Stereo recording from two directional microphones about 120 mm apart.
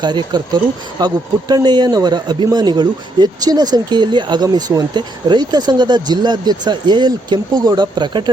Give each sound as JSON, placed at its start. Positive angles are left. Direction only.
{"t": 0.0, "sound": "speech", "side_deg": -40}